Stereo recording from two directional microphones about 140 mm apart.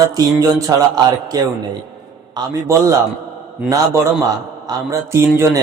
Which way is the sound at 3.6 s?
20° right (ahead or behind).